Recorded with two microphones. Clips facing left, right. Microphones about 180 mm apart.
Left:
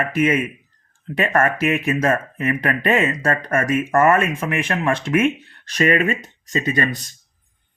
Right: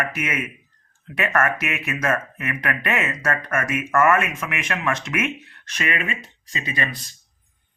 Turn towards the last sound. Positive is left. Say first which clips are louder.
# left 7 dB
turn(degrees=45)  # may be behind; listen again after turning